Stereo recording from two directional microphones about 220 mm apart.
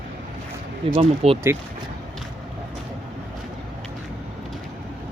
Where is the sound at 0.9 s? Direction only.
25° right (ahead or behind).